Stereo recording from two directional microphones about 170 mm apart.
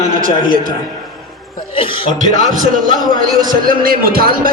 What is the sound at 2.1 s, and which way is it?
A man's voice, 45° right (ahead or behind).